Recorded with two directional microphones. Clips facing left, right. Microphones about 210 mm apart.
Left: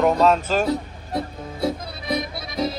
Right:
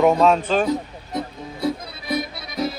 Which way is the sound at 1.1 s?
25° left (ahead or behind).